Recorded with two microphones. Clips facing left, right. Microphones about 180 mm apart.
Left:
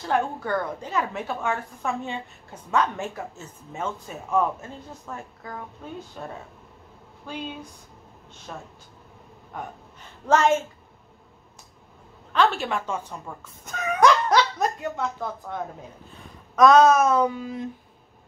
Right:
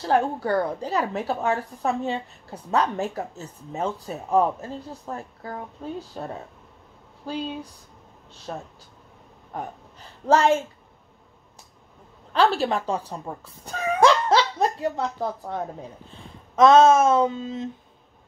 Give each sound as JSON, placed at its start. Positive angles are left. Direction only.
{"t": 0.1, "sound": "a woman's voice", "side_deg": -35}
{"t": 7.2, "sound": "a woman's voice", "side_deg": -35}
{"t": 12.3, "sound": "speech", "side_deg": -35}